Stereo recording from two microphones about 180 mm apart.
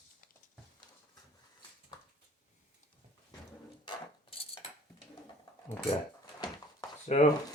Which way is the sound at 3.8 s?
30° left (ahead or behind).